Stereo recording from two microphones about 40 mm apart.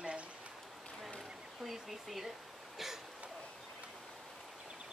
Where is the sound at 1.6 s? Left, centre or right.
Centre.